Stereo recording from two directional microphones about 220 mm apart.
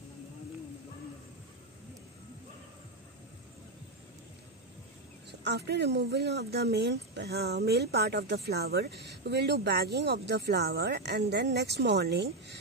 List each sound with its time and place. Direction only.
5.4 s speech: 50° right (ahead or behind)